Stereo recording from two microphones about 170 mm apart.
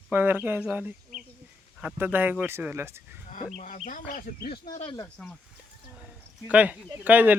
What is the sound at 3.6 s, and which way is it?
Speech, 50° left (ahead or behind).